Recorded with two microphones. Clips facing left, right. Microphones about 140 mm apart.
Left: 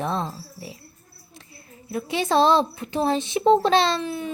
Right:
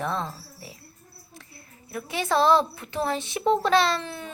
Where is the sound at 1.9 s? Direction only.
25° left (ahead or behind).